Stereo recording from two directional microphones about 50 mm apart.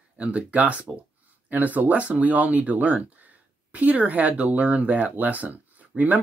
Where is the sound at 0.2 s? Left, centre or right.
Right.